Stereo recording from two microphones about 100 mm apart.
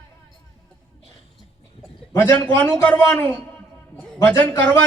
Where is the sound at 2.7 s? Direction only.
15° left (ahead or behind).